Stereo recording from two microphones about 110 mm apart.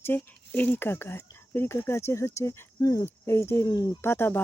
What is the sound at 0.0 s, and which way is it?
Speech, 15° left (ahead or behind).